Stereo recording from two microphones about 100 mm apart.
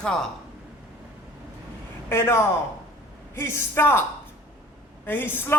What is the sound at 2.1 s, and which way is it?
A man's voice, 25° left (ahead or behind).